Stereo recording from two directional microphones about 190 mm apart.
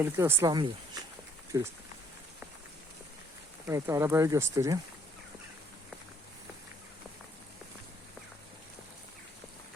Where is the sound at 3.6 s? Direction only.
15° right (ahead or behind).